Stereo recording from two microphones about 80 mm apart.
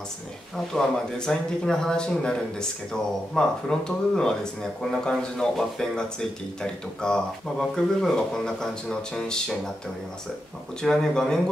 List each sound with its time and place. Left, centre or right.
0.7 s speech: centre
10.8 s speech: centre